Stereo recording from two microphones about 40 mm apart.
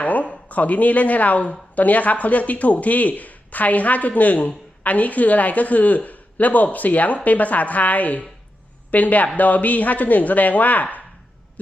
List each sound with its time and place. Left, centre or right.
0.0 s speech: left